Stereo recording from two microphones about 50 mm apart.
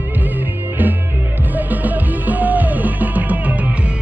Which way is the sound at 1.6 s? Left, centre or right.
Right.